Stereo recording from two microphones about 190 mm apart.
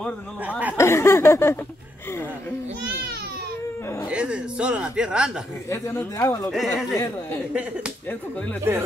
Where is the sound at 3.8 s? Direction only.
15° left (ahead or behind).